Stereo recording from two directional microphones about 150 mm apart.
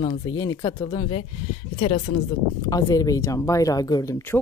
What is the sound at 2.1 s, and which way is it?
Speech, 65° left (ahead or behind).